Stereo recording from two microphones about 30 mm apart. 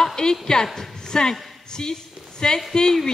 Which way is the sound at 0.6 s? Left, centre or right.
Centre.